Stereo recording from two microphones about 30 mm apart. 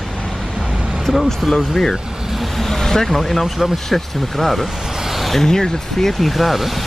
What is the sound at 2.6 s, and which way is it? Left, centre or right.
Speech, centre.